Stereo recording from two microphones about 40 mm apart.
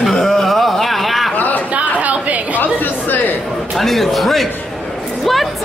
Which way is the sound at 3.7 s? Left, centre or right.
Centre.